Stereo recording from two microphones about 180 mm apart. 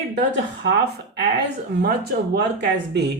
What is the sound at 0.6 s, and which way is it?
Speech, 65° right (ahead or behind).